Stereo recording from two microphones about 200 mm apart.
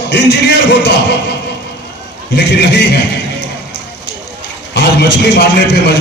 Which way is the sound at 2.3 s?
55° left (ahead or behind).